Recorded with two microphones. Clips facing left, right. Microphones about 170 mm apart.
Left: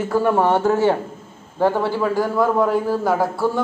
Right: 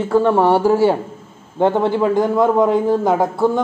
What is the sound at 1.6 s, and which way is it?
A man's voice, 20° right (ahead or behind).